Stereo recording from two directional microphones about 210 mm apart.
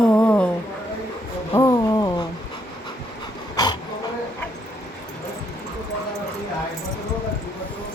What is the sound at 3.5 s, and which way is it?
Dog, 20° left (ahead or behind).